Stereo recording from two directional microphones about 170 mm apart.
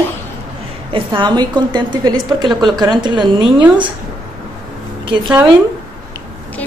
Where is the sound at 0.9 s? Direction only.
30° right (ahead or behind).